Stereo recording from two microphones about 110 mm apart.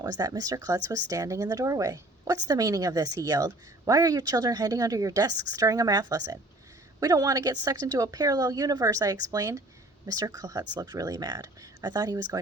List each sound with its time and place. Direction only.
0.0 s speech: 40° right (ahead or behind)